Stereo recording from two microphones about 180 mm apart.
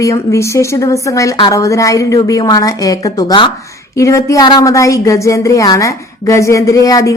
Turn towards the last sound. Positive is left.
turn(degrees=20)  # may be behind; listen again after turning